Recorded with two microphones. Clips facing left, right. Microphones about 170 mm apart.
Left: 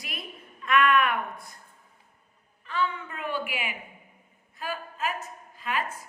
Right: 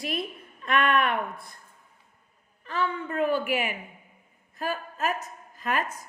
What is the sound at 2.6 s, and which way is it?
A woman's voice, 40° right (ahead or behind).